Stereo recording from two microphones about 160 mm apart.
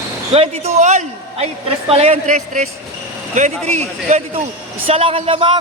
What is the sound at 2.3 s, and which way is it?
A man's voice, 55° right (ahead or behind).